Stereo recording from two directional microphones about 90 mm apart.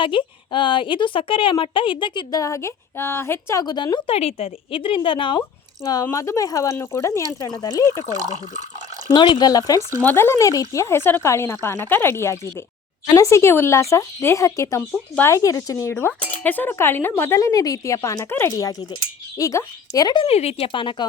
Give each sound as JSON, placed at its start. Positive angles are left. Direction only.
{"t": 0.0, "sound": "a woman's voice", "side_deg": 70}
{"t": 2.3, "sound": "speech", "side_deg": 35}
{"t": 3.6, "sound": "speech", "side_deg": 50}
{"t": 4.0, "sound": "a woman's voice", "side_deg": 90}
{"t": 5.8, "sound": "speech", "side_deg": 45}
{"t": 9.1, "sound": "speech", "side_deg": 55}
{"t": 10.0, "sound": "speech", "side_deg": 25}
{"t": 18.3, "sound": "speech", "side_deg": 30}
{"t": 20.1, "sound": "speech", "side_deg": 65}